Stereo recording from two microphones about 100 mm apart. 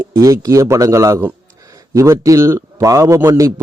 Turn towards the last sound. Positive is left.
turn(degrees=-30)  # may be behind; listen again after turning